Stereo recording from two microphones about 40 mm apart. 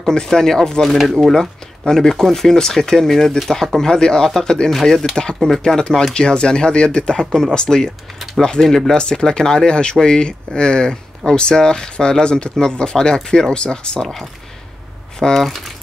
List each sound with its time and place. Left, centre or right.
0.1 s speech: centre
0.8 s speech: centre
8.6 s speech: centre
8.9 s speech: centre
15.1 s speech: centre